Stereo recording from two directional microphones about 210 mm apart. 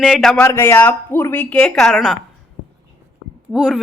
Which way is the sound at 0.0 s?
Centre (ahead or behind).